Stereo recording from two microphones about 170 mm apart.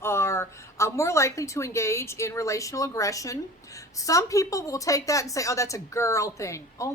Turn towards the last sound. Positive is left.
turn(degrees=15)  # may be behind; listen again after turning